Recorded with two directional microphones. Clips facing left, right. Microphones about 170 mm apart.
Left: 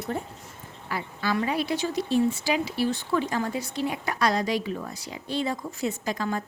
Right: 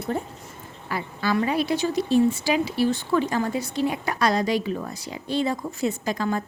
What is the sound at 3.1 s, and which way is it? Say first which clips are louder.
A woman's voice: right 3 dB; 45° right (ahead or behind).